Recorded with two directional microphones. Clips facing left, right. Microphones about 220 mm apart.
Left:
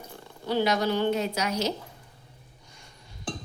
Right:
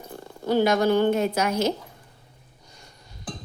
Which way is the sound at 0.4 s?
45° right (ahead or behind).